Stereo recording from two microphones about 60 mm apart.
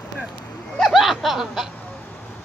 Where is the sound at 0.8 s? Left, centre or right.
Centre.